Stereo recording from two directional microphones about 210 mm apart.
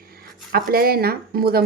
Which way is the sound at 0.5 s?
45° right (ahead or behind).